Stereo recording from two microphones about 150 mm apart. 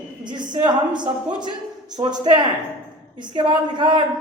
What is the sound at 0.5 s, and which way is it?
A woman's voice, 30° right (ahead or behind).